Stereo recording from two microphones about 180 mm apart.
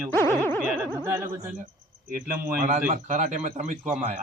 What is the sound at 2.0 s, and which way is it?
Speech, 50° right (ahead or behind).